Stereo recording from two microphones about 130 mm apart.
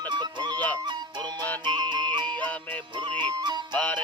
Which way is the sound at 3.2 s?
35° right (ahead or behind).